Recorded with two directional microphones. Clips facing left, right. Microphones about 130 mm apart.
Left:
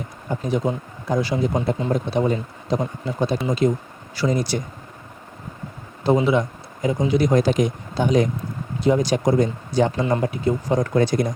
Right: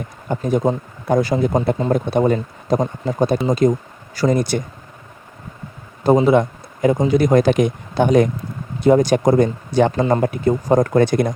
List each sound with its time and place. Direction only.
0.3 s speech: 45° right (ahead or behind)
6.0 s speech: 45° right (ahead or behind)
10.0 s speech: 45° right (ahead or behind)